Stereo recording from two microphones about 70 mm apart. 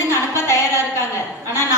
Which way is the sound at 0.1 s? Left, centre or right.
Left.